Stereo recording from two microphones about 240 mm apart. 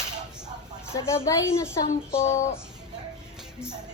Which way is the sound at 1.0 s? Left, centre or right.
Centre.